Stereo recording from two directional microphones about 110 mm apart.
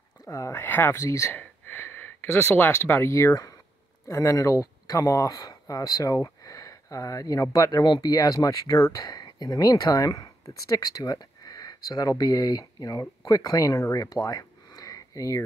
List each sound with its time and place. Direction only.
0.2 s speech: 30° left (ahead or behind)